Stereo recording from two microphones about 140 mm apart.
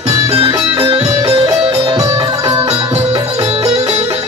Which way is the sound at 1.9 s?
30° right (ahead or behind).